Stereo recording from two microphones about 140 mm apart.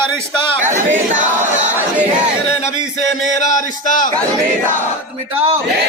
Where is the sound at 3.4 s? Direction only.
65° left (ahead or behind).